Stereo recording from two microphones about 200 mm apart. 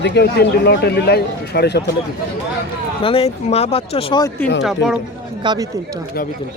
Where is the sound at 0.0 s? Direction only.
55° left (ahead or behind).